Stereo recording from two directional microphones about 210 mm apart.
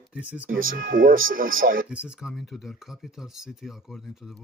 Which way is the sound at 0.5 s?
40° right (ahead or behind).